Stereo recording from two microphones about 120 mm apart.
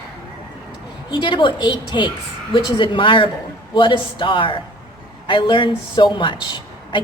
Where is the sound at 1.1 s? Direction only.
45° left (ahead or behind).